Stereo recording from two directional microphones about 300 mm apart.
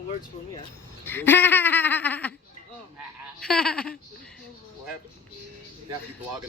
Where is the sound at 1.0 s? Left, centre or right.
Centre.